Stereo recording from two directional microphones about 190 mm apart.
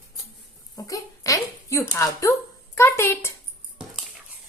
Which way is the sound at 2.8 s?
15° left (ahead or behind).